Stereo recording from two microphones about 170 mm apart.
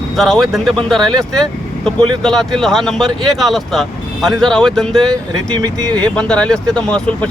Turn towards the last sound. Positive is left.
turn(degrees=5)  # may be behind; listen again after turning